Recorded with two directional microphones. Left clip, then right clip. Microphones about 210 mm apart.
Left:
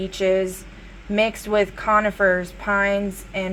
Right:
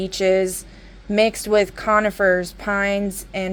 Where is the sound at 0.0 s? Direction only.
55° right (ahead or behind).